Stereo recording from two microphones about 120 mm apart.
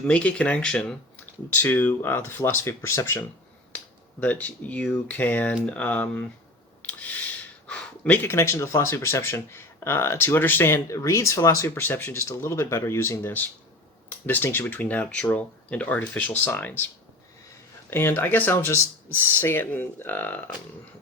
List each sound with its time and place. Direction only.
0.1 s speech: 10° left (ahead or behind)
7.7 s speech: 10° left (ahead or behind)
17.9 s speech: 20° left (ahead or behind)